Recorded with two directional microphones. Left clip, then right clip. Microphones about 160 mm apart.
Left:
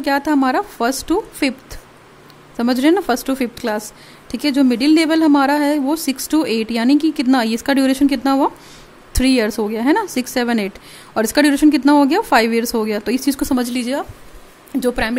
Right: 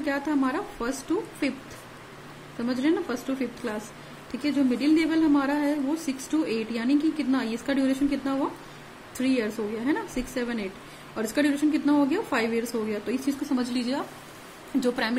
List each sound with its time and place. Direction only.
0.0 s speech: 75° left (ahead or behind)
2.6 s a woman's voice: 80° left; by 15.1 s 60° left (ahead or behind)